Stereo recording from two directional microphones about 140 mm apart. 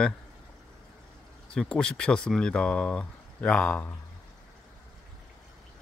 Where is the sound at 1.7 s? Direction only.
5° left (ahead or behind).